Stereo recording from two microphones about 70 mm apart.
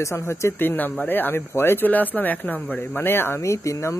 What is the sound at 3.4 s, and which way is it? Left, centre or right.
Speech, left.